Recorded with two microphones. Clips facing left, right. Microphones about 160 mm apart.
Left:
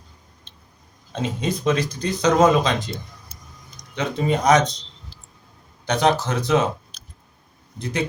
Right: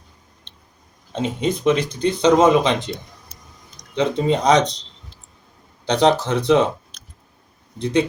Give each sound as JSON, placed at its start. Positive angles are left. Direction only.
{"t": 1.1, "sound": "speech", "side_deg": -25}
{"t": 5.8, "sound": "speech", "side_deg": -25}
{"t": 6.9, "sound": "a sound", "side_deg": 0}